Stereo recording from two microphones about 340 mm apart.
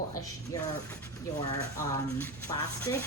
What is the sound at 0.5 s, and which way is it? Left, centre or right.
Speech, centre.